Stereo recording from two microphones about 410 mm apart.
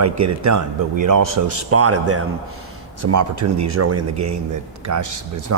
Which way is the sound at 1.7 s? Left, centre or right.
Right.